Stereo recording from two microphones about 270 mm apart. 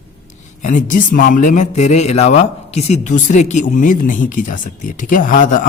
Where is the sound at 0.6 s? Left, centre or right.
Left.